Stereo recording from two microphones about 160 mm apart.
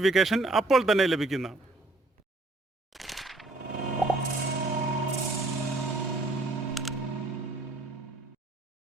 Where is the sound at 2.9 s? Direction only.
Centre (ahead or behind).